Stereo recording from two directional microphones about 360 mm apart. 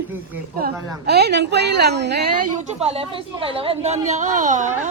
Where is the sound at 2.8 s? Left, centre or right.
Centre.